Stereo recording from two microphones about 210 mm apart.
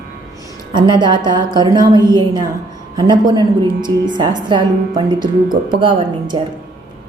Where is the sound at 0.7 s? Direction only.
20° right (ahead or behind).